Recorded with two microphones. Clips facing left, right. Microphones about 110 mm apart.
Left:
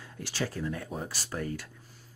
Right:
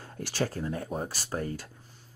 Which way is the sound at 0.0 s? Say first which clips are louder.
Right 3 dB; 45° right (ahead or behind).